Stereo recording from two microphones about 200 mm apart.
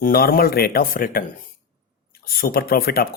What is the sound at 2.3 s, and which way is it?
Speech, 50° left (ahead or behind).